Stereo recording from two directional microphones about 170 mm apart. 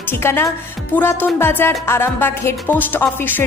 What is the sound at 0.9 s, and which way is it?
Music, 10° left (ahead or behind).